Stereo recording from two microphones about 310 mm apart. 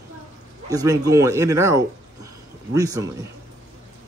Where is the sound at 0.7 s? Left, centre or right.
Centre.